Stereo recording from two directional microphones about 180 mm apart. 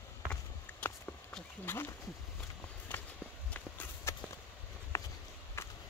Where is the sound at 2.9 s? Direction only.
10° left (ahead or behind).